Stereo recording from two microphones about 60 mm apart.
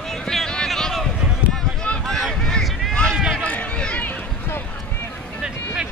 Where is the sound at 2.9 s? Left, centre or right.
Centre.